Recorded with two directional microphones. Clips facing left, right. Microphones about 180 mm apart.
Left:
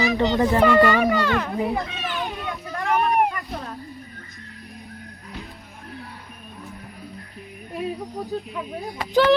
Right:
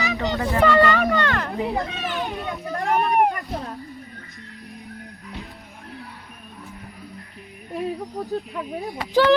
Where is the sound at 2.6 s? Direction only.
40° right (ahead or behind).